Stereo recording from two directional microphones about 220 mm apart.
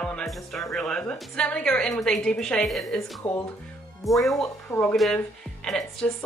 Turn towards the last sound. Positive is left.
turn(degrees=5)  # may be behind; listen again after turning